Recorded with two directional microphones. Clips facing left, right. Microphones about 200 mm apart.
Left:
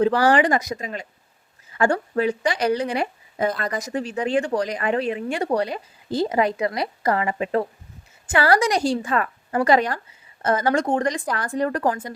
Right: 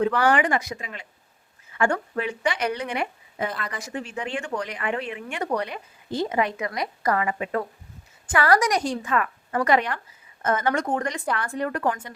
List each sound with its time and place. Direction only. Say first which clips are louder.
0.0 s speech: left 4 dB; 35° left (ahead or behind)